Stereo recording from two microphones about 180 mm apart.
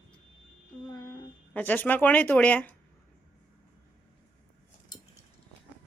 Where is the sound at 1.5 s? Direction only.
10° left (ahead or behind).